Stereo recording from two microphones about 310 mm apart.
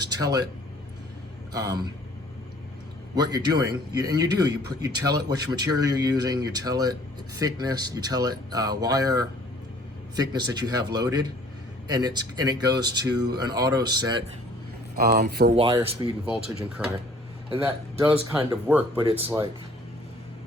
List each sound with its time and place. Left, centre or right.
0.1 s speech: centre
1.5 s speech: centre
3.2 s speech: centre
14.9 s speech: right
15.5 s speech: centre
16.8 s speech: centre